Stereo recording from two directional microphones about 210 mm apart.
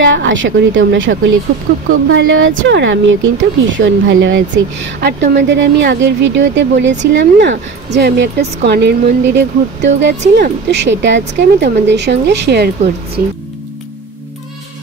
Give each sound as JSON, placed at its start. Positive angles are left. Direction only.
{"t": 0.0, "sound": "speech", "side_deg": -60}
{"t": 1.9, "sound": "speech", "side_deg": -75}
{"t": 5.0, "sound": "speech", "side_deg": -55}